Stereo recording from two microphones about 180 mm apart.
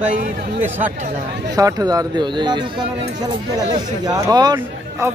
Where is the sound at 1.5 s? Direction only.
20° right (ahead or behind).